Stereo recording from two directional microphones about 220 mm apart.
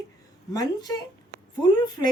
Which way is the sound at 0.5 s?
15° left (ahead or behind).